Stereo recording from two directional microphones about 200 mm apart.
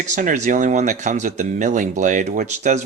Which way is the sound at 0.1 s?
40° right (ahead or behind).